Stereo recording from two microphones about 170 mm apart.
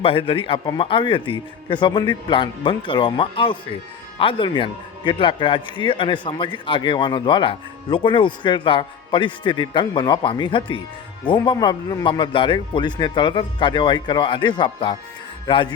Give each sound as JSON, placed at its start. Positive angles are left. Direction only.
{"t": 0.0, "sound": "a man's voice", "side_deg": 30}